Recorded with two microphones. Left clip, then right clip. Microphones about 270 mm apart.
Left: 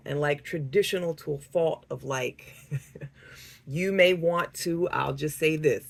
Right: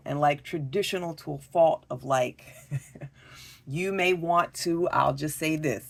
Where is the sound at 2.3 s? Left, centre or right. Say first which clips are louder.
Even; right.